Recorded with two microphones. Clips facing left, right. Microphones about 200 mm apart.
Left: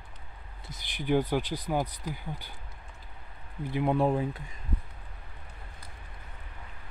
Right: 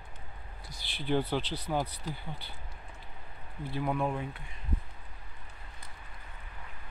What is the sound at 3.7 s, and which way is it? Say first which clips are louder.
Speech: left 5 dB; 20° left (ahead or behind).